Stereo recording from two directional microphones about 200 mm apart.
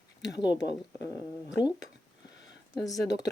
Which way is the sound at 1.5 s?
20° left (ahead or behind).